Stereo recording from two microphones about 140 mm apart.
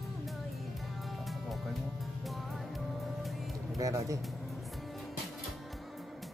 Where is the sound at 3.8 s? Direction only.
25° right (ahead or behind).